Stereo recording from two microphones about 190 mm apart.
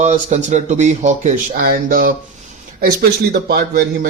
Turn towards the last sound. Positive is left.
turn(degrees=-55)  # may be behind; listen again after turning